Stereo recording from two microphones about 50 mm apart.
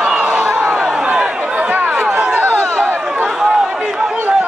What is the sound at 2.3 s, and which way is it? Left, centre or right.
Chatter, right.